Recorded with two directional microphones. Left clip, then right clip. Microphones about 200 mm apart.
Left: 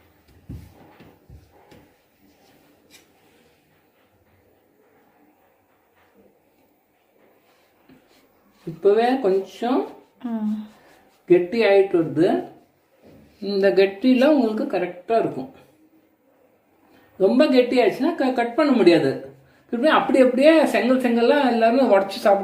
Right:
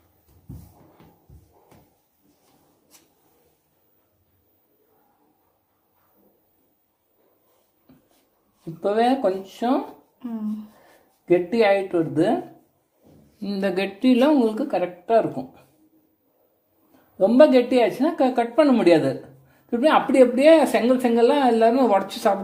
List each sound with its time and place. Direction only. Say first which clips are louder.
8.8 s a woman's voice: left 2 dB; 55° right (ahead or behind)
10.2 s speech: left 4 dB; 15° right (ahead or behind)
11.3 s a woman's voice: left 1 dB; 55° right (ahead or behind)
13.4 s a woman's voice: left 7 dB; 55° right (ahead or behind)
17.2 s a woman's voice: right 2 dB; 55° right (ahead or behind)